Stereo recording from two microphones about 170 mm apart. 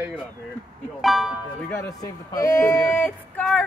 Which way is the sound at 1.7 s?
15° left (ahead or behind).